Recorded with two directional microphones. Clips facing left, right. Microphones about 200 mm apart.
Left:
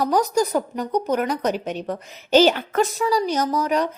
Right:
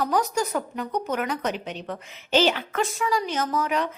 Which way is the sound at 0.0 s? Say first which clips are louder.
Left 5 dB; 40° left (ahead or behind).